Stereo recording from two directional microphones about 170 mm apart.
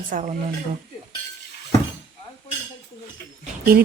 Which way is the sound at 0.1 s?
55° right (ahead or behind).